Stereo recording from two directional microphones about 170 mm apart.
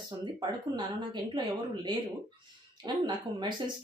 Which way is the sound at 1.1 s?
25° right (ahead or behind).